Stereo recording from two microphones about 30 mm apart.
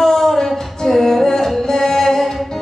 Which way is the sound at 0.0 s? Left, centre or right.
Centre.